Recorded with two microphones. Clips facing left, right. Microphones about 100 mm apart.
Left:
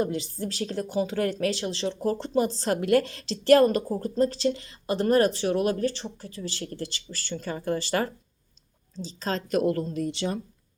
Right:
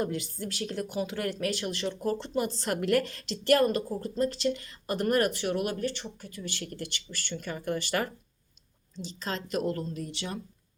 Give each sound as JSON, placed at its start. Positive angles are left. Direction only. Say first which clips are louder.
{"t": 0.0, "sound": "speech", "louder": "left 4 dB", "side_deg": 25}
{"t": 2.8, "sound": "a woman's voice", "louder": "left 4 dB", "side_deg": 20}
{"t": 3.5, "sound": "speech", "louder": "left 5 dB", "side_deg": 35}
{"t": 9.1, "sound": "speech", "louder": "left 6 dB", "side_deg": 35}
{"t": 9.7, "sound": "speech", "louder": "left 7 dB", "side_deg": 90}